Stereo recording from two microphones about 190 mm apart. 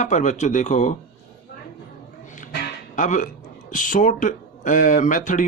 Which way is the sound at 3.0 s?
45° left (ahead or behind).